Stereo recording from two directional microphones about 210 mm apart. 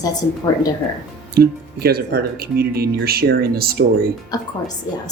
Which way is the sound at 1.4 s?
45° right (ahead or behind).